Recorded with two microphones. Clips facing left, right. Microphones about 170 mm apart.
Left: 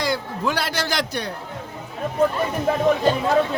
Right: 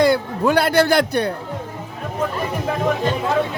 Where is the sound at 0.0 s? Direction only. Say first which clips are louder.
Right 8 dB; 55° right (ahead or behind).